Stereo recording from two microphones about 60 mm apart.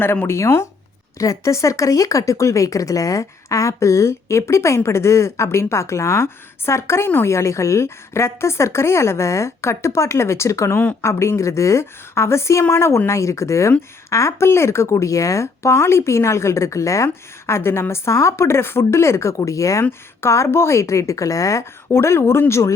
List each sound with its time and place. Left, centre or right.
0.0 s speech: left
1.2 s speech: left
7.3 s speech: left
13.1 s speech: left
19.9 s speech: left
21.9 s speech: left